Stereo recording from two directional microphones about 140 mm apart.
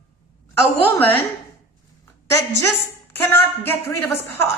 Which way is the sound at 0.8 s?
15° left (ahead or behind).